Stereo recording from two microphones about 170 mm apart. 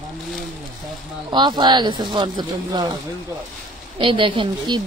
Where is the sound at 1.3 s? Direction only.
25° right (ahead or behind).